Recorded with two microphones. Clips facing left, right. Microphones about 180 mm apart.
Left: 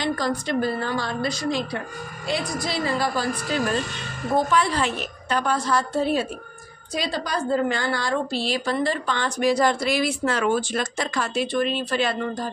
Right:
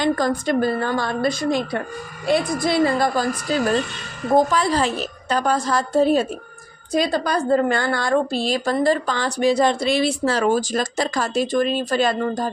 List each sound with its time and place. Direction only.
0.0 s a woman's voice: 50° right (ahead or behind)
3.5 s a woman's voice: 35° right (ahead or behind)